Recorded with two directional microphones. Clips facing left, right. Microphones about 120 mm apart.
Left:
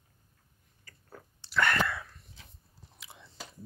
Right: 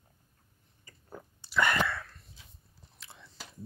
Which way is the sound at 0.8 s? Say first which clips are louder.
Right 4 dB; 15° right (ahead or behind).